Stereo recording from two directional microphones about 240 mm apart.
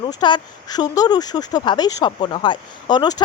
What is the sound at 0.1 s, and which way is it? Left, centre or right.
A woman's voice, centre.